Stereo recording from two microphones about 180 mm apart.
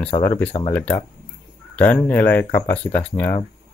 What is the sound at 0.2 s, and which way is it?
Speech, 10° left (ahead or behind).